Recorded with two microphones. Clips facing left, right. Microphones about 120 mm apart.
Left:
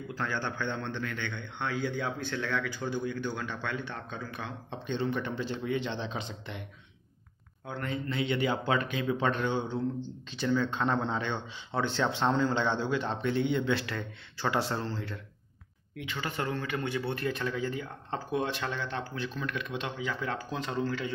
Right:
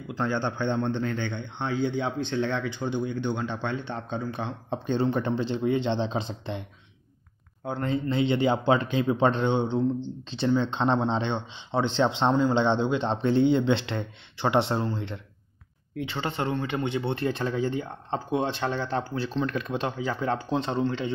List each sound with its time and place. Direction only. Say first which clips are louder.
0.1 s speech: right 7 dB; 25° right (ahead or behind)
7.6 s speech: right 7 dB; 30° right (ahead or behind)